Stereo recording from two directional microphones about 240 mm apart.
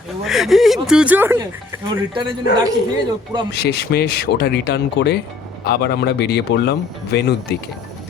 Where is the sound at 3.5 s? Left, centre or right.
Left.